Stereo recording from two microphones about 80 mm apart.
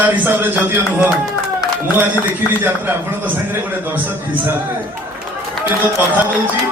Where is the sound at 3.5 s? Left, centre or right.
Right.